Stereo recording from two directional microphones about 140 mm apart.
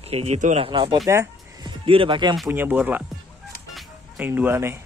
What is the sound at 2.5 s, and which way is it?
Speech, 10° right (ahead or behind).